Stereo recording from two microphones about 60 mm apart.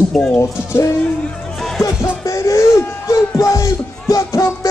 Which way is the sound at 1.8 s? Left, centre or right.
Left.